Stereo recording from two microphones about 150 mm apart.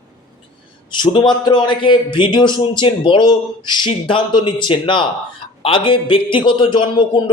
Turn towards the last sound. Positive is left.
turn(degrees=30)  # may be behind; listen again after turning